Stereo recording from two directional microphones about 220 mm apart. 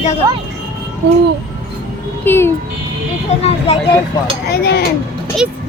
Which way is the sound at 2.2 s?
10° left (ahead or behind).